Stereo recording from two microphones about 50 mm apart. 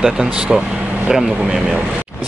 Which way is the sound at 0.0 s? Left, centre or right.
Centre.